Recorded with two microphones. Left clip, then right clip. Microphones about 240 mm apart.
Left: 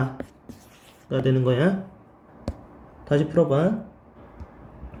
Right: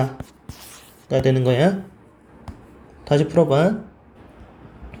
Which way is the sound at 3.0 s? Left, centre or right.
Centre.